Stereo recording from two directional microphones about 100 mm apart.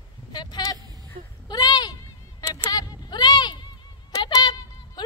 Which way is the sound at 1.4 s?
45° left (ahead or behind).